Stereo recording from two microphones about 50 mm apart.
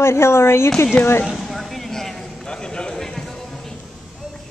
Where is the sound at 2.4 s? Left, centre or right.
Centre.